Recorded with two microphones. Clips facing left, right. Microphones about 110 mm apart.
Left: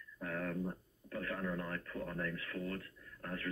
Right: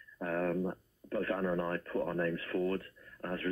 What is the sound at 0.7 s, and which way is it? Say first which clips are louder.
Speech: right 6 dB; 45° right (ahead or behind).